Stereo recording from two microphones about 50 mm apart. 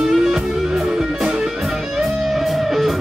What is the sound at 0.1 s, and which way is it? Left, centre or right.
Music, centre.